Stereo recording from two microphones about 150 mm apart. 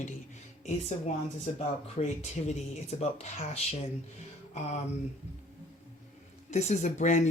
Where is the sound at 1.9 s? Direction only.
50° left (ahead or behind).